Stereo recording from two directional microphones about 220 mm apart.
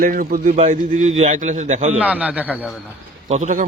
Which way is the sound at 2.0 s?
5° right (ahead or behind).